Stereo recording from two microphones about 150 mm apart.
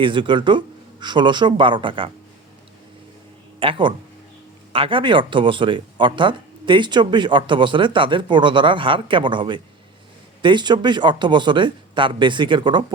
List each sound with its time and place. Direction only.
0.0 s speech: 35° right (ahead or behind)
3.6 s speech: 35° right (ahead or behind)